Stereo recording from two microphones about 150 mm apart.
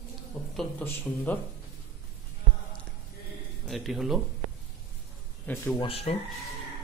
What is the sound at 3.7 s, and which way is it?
Speech, centre (ahead or behind).